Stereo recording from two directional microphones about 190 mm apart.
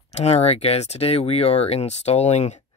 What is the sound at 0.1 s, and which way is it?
Speech, 35° left (ahead or behind).